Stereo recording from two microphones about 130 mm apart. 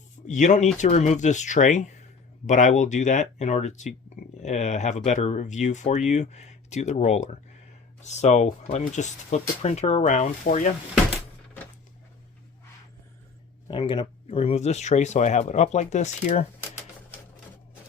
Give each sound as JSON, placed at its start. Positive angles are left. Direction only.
{"t": 0.3, "sound": "speech", "side_deg": 70}
{"t": 13.7, "sound": "speech", "side_deg": 40}